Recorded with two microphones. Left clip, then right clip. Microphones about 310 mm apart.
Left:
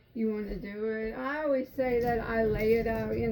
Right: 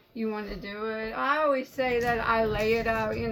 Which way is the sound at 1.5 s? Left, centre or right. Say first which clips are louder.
Right 1 dB; centre.